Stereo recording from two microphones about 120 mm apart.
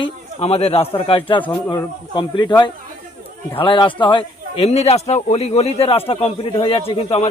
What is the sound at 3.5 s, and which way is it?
Speech, 45° left (ahead or behind).